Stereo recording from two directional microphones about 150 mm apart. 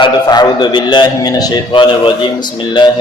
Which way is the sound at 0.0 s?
30° left (ahead or behind).